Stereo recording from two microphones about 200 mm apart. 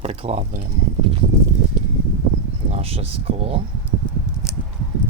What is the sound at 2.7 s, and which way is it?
Speech, 30° right (ahead or behind).